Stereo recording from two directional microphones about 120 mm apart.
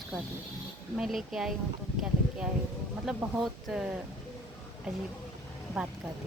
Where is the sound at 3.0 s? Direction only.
Centre (ahead or behind).